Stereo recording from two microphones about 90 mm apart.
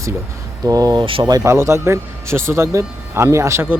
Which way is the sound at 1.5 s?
30° right (ahead or behind).